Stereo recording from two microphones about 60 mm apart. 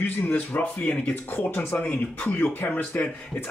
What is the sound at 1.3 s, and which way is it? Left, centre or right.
Speech, left.